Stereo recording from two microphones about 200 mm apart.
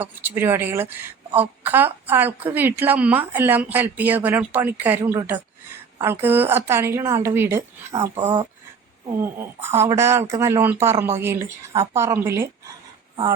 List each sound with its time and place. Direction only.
0.0 s a woman's voice: 10° right (ahead or behind)
8.1 s speech: 25° right (ahead or behind)
9.2 s a woman's voice: 10° right (ahead or behind)